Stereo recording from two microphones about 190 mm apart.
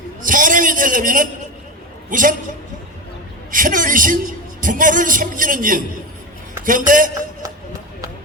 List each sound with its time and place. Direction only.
0.2 s a sound: 45° right (ahead or behind)
2.0 s a woman's voice: 45° right (ahead or behind)
3.5 s a man's voice: 45° right (ahead or behind)